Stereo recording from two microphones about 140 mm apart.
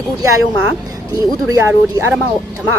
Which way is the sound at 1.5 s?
20° right (ahead or behind).